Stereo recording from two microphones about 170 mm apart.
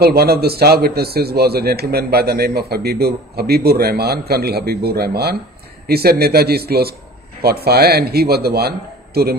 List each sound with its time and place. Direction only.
0.0 s a man's voice: 65° right (ahead or behind)